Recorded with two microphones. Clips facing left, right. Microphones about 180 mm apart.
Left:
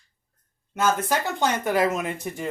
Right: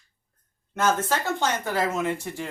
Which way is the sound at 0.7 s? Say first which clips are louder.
Left 1 dB; 15° left (ahead or behind).